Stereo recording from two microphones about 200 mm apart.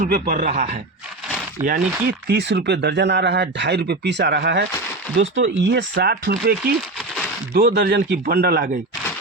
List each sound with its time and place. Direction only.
0.1 s speech: 45° right (ahead or behind)
5.1 s speech: 70° right (ahead or behind); by 8.7 s 50° right (ahead or behind)